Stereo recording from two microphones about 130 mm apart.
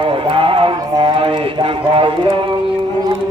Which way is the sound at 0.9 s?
40° right (ahead or behind).